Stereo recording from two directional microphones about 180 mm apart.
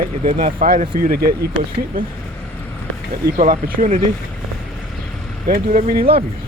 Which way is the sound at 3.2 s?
50° right (ahead or behind).